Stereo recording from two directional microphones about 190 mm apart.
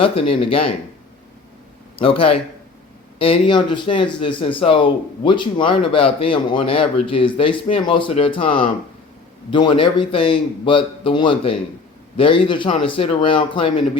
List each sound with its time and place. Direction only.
0.0 s speech: 30° left (ahead or behind)
2.0 s speech: 30° left (ahead or behind)